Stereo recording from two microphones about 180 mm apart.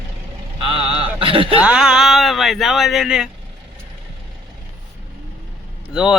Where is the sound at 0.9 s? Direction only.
30° right (ahead or behind).